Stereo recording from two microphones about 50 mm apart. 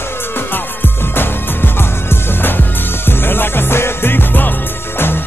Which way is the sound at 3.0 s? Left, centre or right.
Left.